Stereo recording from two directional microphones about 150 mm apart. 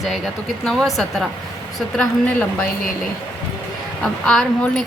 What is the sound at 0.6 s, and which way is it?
A woman's voice, centre (ahead or behind).